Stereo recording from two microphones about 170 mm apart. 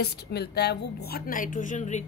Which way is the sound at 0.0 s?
75° left (ahead or behind).